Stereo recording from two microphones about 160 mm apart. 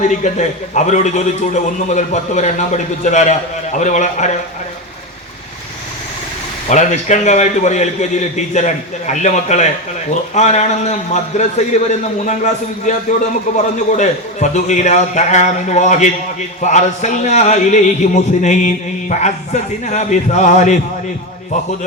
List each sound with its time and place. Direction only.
0.0 s a man's voice: 50° left (ahead or behind)
6.7 s a man's voice: 50° left (ahead or behind)